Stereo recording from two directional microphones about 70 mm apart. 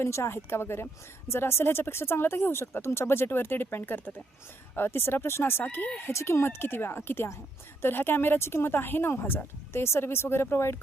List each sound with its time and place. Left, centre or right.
0.0 s speech: left